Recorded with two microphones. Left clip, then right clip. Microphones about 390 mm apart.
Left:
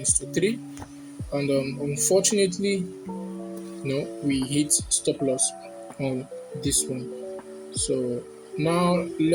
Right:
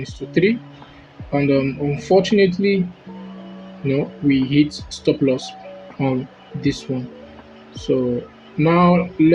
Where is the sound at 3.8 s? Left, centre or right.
Left.